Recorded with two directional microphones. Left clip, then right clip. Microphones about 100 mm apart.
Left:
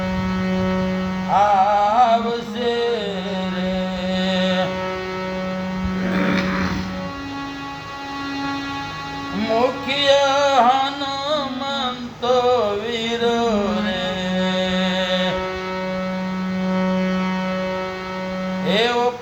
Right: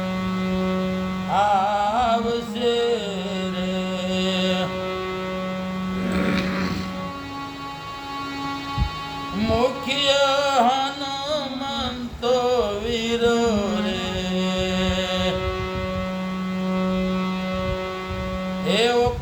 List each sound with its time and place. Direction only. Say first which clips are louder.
0.4 s music: left 3 dB; 20° left (ahead or behind)
1.3 s music: left 4 dB; 5° right (ahead or behind)
4.1 s a sound: left 2 dB; 5° right (ahead or behind)
6.1 s music: left 4 dB; 5° right (ahead or behind)
9.5 s music: left 3 dB; 5° right (ahead or behind)
11.3 s a sound: left 4 dB; centre (ahead or behind)
14.3 s music: left 3 dB; centre (ahead or behind)
16.7 s a sound: left 3 dB; 20° left (ahead or behind)
18.6 s music: left 1 dB; centre (ahead or behind)